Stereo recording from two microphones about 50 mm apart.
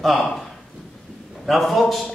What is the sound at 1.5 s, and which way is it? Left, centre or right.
Speech, centre.